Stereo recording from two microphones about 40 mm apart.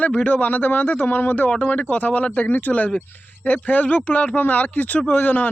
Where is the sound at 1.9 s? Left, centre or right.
Left.